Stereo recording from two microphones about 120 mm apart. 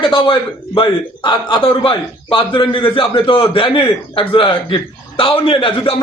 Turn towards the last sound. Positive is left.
turn(degrees=45)  # may be behind; listen again after turning